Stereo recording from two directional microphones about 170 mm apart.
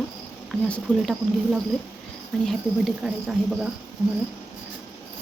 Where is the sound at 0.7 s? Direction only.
Centre (ahead or behind).